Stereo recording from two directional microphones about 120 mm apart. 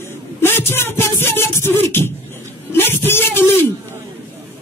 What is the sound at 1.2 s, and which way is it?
Music, 20° left (ahead or behind).